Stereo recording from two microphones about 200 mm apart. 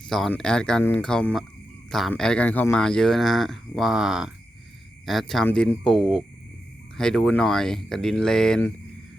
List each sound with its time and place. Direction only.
0.1 s speech: centre (ahead or behind)